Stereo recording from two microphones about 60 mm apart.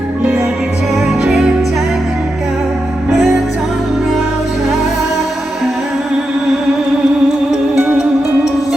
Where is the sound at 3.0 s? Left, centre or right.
Centre.